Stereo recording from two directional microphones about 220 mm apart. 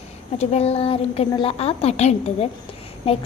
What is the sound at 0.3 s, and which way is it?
A child's voice, 30° left (ahead or behind).